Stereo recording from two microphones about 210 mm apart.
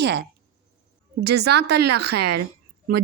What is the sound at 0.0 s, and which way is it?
Speech, 55° right (ahead or behind).